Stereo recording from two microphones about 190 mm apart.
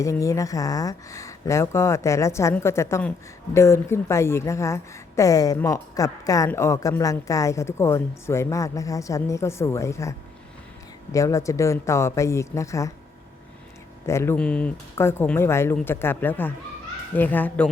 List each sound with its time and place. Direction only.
0.0 s a woman's voice: 15° left (ahead or behind)
14.1 s a woman's voice: 15° left (ahead or behind)